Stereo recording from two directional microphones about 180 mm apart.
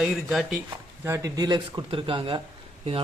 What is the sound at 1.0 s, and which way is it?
Speech, 15° right (ahead or behind).